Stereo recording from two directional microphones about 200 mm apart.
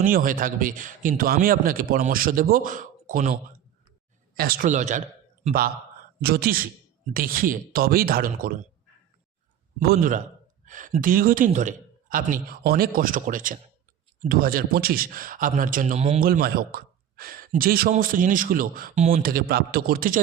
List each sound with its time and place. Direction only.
0.0 s speech: 45° right (ahead or behind)
4.4 s a man's voice: 45° right (ahead or behind)
6.2 s speech: 50° right (ahead or behind)
9.8 s speech: 45° right (ahead or behind)
16.2 s speech: 45° right (ahead or behind)